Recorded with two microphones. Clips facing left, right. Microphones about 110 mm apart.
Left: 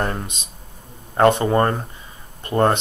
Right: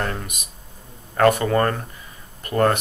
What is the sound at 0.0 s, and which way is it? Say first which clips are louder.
Speech: left 3 dB; 25° left (ahead or behind).